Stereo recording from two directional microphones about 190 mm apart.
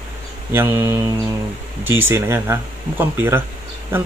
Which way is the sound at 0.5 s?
10° right (ahead or behind).